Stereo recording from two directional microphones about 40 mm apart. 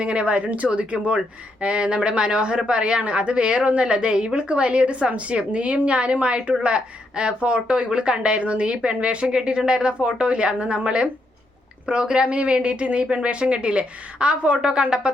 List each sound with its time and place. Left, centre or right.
0.0 s speech: right